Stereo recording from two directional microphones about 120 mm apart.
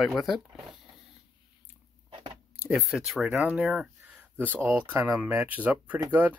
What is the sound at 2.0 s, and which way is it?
Chewing, 40° right (ahead or behind).